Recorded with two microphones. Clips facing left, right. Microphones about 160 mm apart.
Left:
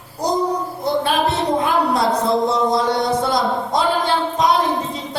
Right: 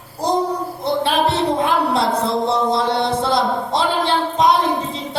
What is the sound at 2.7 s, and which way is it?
A woman's voice, 25° right (ahead or behind).